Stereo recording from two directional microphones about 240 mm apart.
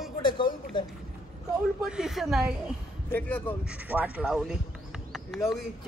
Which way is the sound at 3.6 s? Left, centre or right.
Centre.